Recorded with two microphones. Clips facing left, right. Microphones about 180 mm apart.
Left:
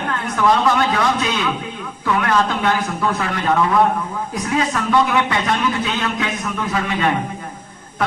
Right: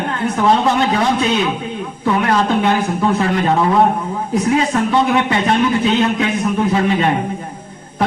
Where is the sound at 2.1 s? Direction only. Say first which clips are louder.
Right 3 dB; 25° right (ahead or behind).